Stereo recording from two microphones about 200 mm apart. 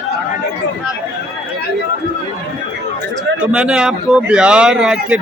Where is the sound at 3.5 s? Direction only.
5° right (ahead or behind).